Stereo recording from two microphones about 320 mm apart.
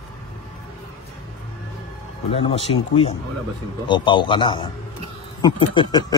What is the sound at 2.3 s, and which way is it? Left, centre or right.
Speech, centre.